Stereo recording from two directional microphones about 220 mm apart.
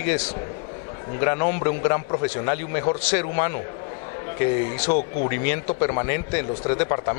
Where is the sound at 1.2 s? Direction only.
20° left (ahead or behind).